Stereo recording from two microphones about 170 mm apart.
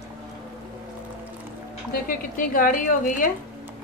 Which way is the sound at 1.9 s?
55° left (ahead or behind).